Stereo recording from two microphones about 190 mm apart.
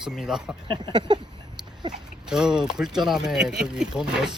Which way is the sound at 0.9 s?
25° right (ahead or behind).